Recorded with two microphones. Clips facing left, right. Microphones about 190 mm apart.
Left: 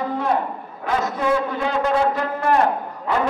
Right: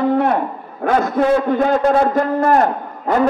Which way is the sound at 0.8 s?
55° right (ahead or behind).